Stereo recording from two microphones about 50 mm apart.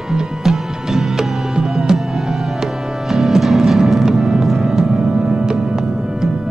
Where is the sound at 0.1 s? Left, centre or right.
Centre.